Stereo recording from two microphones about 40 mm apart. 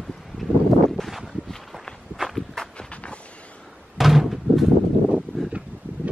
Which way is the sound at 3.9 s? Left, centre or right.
Centre.